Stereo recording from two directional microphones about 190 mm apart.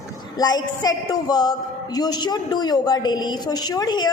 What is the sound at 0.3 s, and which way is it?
A woman's voice, 20° left (ahead or behind).